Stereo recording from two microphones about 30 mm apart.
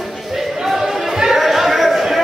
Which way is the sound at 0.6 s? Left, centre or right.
Centre.